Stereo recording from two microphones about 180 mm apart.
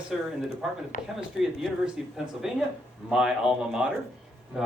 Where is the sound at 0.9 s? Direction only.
50° left (ahead or behind).